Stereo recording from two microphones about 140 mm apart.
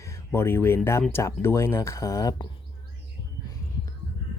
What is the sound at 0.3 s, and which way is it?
Speech, 15° left (ahead or behind).